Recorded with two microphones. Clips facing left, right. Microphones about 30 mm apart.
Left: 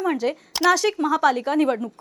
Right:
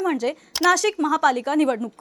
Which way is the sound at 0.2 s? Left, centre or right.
Centre.